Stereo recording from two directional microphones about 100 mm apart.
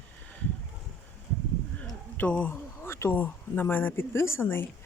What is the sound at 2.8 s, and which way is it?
Speech, 25° left (ahead or behind).